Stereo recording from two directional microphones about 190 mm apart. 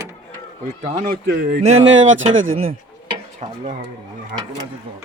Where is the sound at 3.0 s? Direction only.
35° right (ahead or behind).